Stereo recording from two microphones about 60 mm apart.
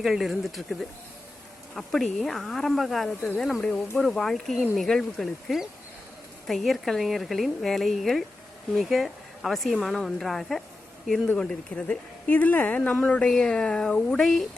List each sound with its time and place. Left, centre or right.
0.0 s a woman's voice: centre
11.3 s speech: centre
13.2 s speech: centre